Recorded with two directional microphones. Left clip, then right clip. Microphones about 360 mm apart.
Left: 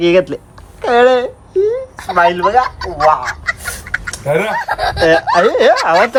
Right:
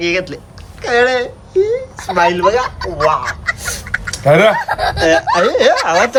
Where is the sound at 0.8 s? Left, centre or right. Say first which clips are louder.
Left 3 dB; centre.